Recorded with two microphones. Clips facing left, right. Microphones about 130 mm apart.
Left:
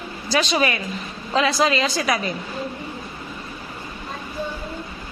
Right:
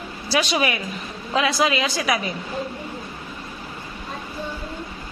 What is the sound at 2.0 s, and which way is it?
Speech, 5° right (ahead or behind).